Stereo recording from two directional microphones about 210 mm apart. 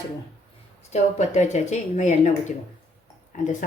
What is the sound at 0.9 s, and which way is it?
Speech, 35° left (ahead or behind).